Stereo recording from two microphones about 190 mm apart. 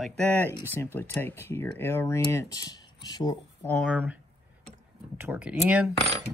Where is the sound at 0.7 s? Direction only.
10° left (ahead or behind).